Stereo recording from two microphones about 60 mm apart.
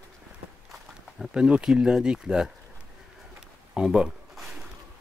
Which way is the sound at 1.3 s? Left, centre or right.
Centre.